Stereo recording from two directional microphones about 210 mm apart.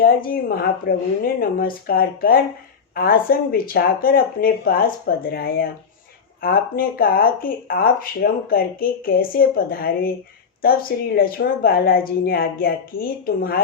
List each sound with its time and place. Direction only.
0.0 s speech: 45° left (ahead or behind)